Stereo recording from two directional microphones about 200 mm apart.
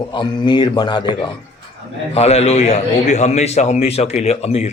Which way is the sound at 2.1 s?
30° left (ahead or behind).